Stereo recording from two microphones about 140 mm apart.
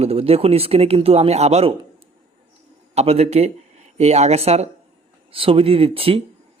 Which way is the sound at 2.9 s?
45° right (ahead or behind).